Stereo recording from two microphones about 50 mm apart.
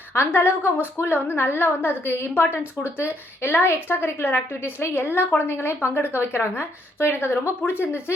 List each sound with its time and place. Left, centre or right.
0.1 s a woman's voice: left